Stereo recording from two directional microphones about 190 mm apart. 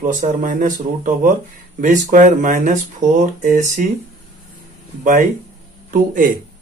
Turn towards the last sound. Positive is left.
turn(degrees=-45)  # may be behind; listen again after turning